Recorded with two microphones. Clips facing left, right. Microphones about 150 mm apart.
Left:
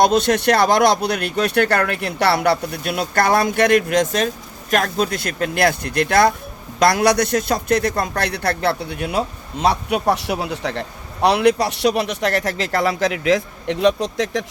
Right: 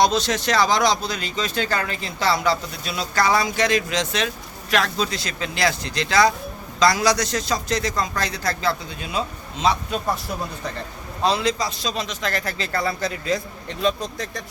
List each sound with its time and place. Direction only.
0.0 s a man's voice: 55° left (ahead or behind); by 14.4 s 90° left